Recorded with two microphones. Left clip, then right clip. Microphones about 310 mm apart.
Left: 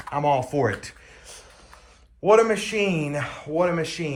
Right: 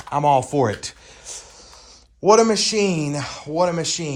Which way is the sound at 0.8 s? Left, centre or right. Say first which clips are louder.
Right 6 dB; centre.